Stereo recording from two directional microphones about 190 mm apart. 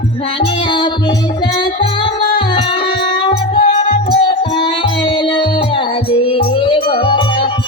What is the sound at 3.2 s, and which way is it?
Music, 30° left (ahead or behind).